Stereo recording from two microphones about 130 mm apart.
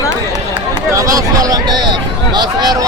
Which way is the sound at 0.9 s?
25° right (ahead or behind).